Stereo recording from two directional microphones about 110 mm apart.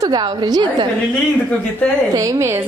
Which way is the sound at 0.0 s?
40° right (ahead or behind).